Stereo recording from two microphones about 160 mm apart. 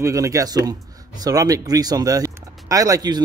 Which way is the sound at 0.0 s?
20° right (ahead or behind).